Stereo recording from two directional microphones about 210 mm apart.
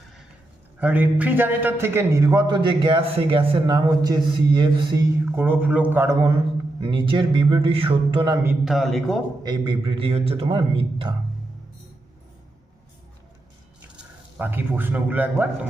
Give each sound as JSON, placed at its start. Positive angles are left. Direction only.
{"t": 0.8, "sound": "a man's voice", "side_deg": -10}
{"t": 5.2, "sound": "a man's voice", "side_deg": -10}
{"t": 6.8, "sound": "a man's voice", "side_deg": -25}
{"t": 8.4, "sound": "speech", "side_deg": 0}
{"t": 9.4, "sound": "a man's voice", "side_deg": -20}
{"t": 13.9, "sound": "speech", "side_deg": -5}